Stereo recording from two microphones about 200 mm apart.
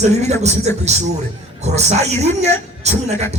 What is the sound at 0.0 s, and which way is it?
Music, 35° right (ahead or behind).